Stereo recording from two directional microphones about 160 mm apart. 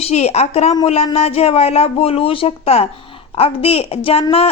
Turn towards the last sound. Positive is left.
turn(degrees=35)  # may be behind; listen again after turning